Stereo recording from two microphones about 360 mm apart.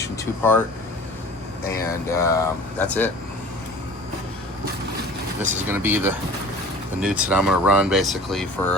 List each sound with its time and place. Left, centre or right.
0.0 s vehicle: centre
1.6 s speech: centre
5.6 s speech: centre